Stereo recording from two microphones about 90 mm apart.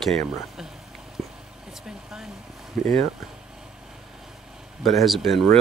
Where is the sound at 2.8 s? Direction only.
5° left (ahead or behind).